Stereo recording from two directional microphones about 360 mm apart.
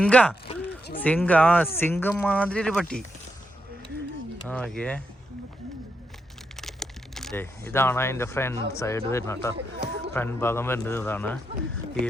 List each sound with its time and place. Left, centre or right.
0.0 s speech: centre
0.4 s a sound: centre
1.0 s speech: centre
4.4 s speech: centre
6.6 s speech: centre
9.7 s a sound: right
10.2 s speech: centre